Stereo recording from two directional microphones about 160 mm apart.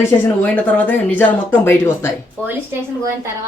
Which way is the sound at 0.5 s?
10° left (ahead or behind).